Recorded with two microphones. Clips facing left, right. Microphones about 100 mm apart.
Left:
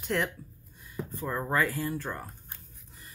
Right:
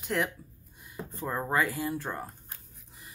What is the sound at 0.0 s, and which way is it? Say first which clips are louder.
Speech: even; 5° right (ahead or behind).